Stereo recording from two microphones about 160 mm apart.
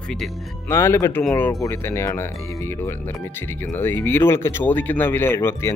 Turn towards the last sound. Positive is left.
turn(degrees=15)  # may be behind; listen again after turning